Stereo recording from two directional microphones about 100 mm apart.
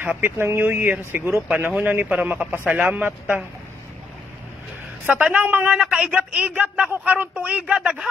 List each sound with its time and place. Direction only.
0.0 s speech: 20° right (ahead or behind)
5.0 s speech: 15° right (ahead or behind)